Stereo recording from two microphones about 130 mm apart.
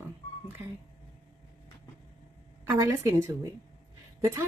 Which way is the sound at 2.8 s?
25° right (ahead or behind).